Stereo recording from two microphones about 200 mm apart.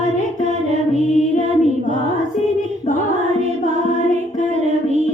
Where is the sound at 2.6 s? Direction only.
40° left (ahead or behind).